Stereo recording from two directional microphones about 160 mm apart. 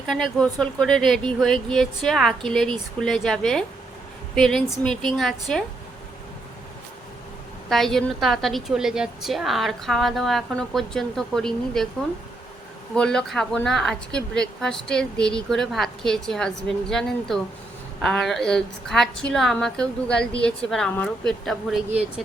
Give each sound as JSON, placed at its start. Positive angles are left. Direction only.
{"t": 0.1, "sound": "a woman's voice", "side_deg": 5}
{"t": 7.7, "sound": "a woman's voice", "side_deg": 0}
{"t": 13.0, "sound": "a woman's voice", "side_deg": 5}